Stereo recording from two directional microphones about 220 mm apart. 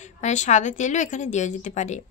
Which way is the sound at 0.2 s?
35° left (ahead or behind).